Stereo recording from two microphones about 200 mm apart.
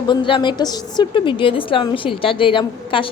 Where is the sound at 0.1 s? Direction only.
25° left (ahead or behind).